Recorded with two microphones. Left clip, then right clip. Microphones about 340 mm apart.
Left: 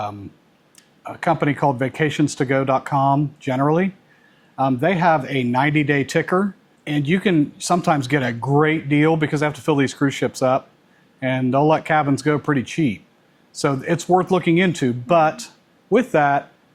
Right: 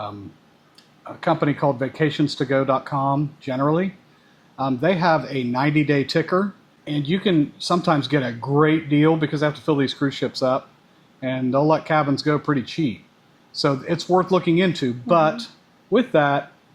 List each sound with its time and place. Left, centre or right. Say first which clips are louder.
1.0 s speech: left 1 dB; left